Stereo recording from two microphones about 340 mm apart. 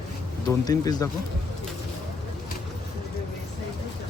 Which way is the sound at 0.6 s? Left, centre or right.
Centre.